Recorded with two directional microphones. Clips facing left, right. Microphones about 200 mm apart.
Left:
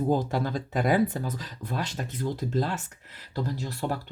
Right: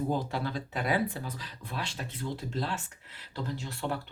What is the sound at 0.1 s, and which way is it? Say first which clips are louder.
Speech: left 5 dB; 45° left (ahead or behind).